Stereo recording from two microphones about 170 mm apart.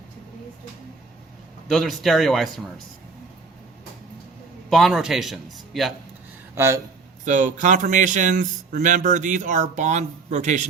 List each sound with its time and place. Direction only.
1.6 s a man's voice: centre (ahead or behind)
4.7 s a man's voice: centre (ahead or behind)
6.6 s speech: 15° right (ahead or behind)
7.3 s speech: 45° right (ahead or behind)